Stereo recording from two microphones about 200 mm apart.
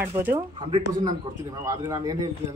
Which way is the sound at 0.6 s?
25° right (ahead or behind).